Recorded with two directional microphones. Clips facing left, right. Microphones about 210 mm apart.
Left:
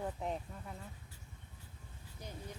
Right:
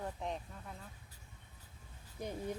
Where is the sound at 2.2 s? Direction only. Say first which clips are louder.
Right 8 dB; 55° right (ahead or behind).